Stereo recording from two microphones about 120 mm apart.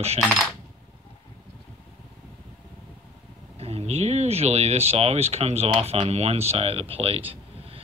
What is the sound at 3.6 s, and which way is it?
Speech, 60° right (ahead or behind).